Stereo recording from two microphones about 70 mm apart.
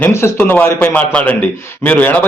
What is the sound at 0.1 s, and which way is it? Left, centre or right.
A man's voice, left.